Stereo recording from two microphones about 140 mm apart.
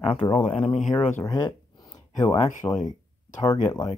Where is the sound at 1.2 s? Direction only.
25° left (ahead or behind).